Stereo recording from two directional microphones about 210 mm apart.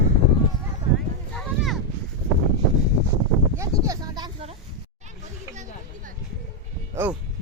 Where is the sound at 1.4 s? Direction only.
Centre (ahead or behind).